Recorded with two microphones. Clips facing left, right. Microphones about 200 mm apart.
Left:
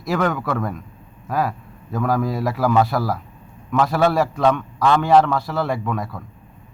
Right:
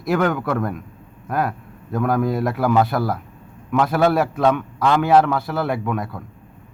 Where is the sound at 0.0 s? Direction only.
Centre (ahead or behind).